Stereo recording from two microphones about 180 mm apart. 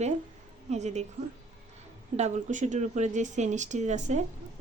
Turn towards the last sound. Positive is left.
turn(degrees=-40)  # may be behind; listen again after turning